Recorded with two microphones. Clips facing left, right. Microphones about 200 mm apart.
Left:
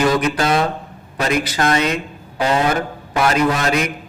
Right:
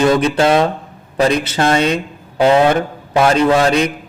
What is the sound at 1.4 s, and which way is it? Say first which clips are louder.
Speech: right 3 dB; 25° right (ahead or behind).